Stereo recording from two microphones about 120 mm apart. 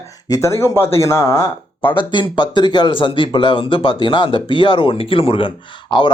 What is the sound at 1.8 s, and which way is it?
Speech, 45° left (ahead or behind).